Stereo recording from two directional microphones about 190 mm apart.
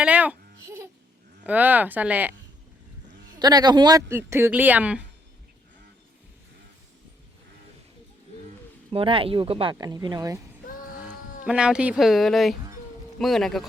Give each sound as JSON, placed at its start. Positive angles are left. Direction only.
{"t": 0.0, "sound": "babbling", "side_deg": -5}
{"t": 1.5, "sound": "speech", "side_deg": -10}
{"t": 3.3, "sound": "speech", "side_deg": -20}
{"t": 8.9, "sound": "speech", "side_deg": -30}
{"t": 11.4, "sound": "speech", "side_deg": -5}